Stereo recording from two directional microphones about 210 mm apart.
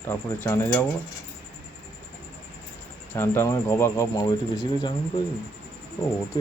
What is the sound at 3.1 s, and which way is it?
Speech, 10° left (ahead or behind).